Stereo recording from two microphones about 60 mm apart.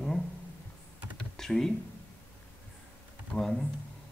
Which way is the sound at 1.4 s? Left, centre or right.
Centre.